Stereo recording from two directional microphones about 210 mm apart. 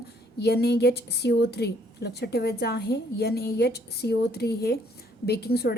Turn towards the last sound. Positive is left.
turn(degrees=50)  # may be behind; listen again after turning